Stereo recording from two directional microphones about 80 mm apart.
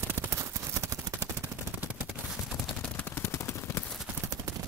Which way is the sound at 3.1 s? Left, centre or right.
Left.